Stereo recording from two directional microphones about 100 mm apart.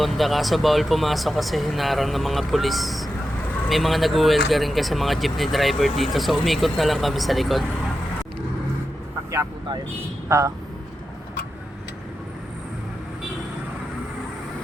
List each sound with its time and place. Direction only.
0.0 s speech: centre (ahead or behind)
10.2 s speech: 30° right (ahead or behind)